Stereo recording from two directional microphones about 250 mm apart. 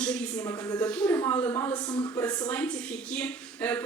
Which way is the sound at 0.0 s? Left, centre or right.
Centre.